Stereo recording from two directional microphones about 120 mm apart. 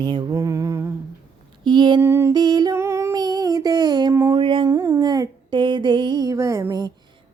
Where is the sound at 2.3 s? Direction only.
35° right (ahead or behind).